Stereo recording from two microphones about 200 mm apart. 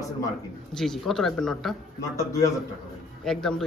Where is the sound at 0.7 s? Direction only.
Centre (ahead or behind).